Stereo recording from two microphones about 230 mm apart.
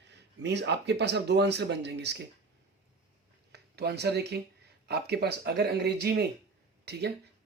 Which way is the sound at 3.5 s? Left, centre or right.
Right.